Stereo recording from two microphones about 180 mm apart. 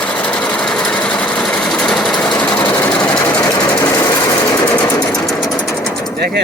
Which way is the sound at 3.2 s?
20° left (ahead or behind).